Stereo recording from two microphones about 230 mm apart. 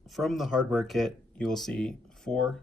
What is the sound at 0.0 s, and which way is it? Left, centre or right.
Speech, centre.